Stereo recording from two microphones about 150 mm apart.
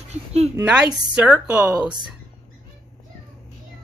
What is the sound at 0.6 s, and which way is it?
Speech, 10° right (ahead or behind).